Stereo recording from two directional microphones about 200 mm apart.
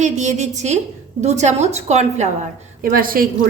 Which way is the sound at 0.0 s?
35° right (ahead or behind).